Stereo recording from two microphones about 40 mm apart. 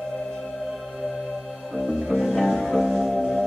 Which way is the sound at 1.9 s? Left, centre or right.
Centre.